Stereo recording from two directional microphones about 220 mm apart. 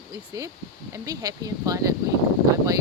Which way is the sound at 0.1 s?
15° right (ahead or behind).